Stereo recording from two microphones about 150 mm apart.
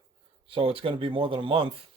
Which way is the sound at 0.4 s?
35° right (ahead or behind).